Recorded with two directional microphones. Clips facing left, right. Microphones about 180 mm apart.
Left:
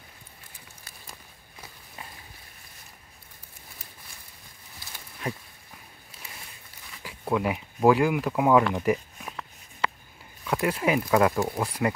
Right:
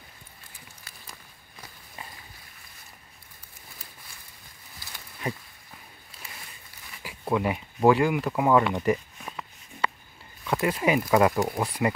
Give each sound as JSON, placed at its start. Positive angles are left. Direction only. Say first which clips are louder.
{"t": 5.2, "sound": "a sound", "louder": "right 1 dB", "side_deg": 0}
{"t": 7.0, "sound": "speech", "louder": "even", "side_deg": -5}
{"t": 10.4, "sound": "speech", "louder": "right 1 dB", "side_deg": 0}